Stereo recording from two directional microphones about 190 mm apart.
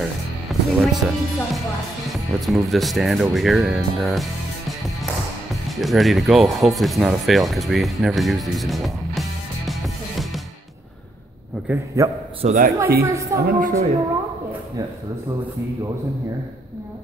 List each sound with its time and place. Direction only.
0.0 s speech: centre (ahead or behind)
11.6 s a man's voice: 10° right (ahead or behind)
12.4 s speech: 40° right (ahead or behind)
13.0 s a man's voice: 15° right (ahead or behind)
13.4 s speech: 50° right (ahead or behind)